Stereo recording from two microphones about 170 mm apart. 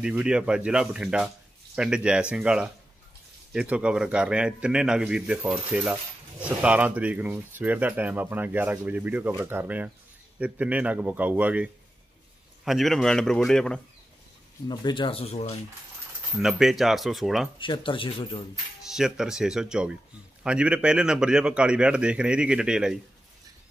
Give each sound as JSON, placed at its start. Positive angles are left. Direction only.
{"t": 0.0, "sound": "a man's voice", "side_deg": -5}
{"t": 14.7, "sound": "speech", "side_deg": 25}
{"t": 16.3, "sound": "a man's voice", "side_deg": 0}
{"t": 17.6, "sound": "speech", "side_deg": 30}
{"t": 18.9, "sound": "a man's voice", "side_deg": -5}